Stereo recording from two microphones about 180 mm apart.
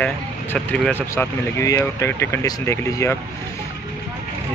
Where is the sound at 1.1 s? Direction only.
15° left (ahead or behind).